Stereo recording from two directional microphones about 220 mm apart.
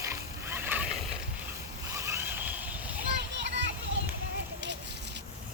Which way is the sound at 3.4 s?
55° right (ahead or behind).